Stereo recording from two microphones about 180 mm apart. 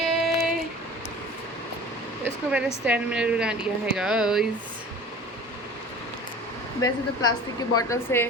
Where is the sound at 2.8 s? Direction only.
5° right (ahead or behind).